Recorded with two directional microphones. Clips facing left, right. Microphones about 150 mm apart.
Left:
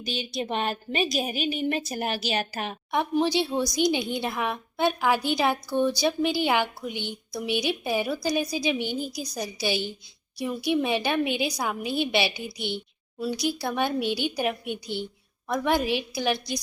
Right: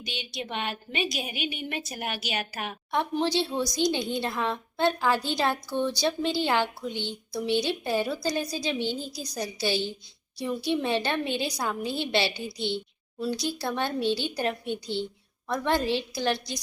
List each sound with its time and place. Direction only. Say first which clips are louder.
0.0 s a woman's voice: left 6 dB; 40° left (ahead or behind)
2.9 s a woman's voice: left 2 dB; 15° left (ahead or behind)